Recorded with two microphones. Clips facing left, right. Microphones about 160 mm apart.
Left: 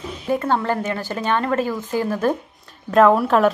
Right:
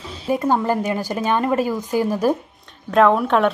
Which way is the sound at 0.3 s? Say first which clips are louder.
Right 2 dB; 10° right (ahead or behind).